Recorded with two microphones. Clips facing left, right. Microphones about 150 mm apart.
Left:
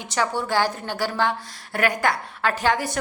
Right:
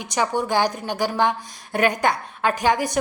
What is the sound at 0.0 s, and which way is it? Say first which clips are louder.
A woman's voice: right 2 dB; 15° right (ahead or behind).